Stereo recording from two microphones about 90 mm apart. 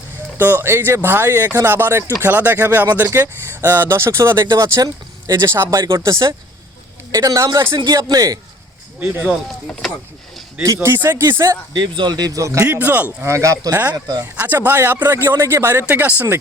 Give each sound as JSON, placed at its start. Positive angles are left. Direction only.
{"t": 0.3, "sound": "speech", "side_deg": -20}
{"t": 9.2, "sound": "speech", "side_deg": 10}
{"t": 10.8, "sound": "speech", "side_deg": -25}
{"t": 11.7, "sound": "speech", "side_deg": -60}
{"t": 12.6, "sound": "speech", "side_deg": -20}
{"t": 13.2, "sound": "speech", "side_deg": -35}
{"t": 14.3, "sound": "speech", "side_deg": -20}
{"t": 15.9, "sound": "speech", "side_deg": -15}